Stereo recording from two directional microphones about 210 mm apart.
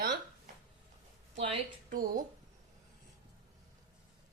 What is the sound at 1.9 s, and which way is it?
Speech, 40° right (ahead or behind).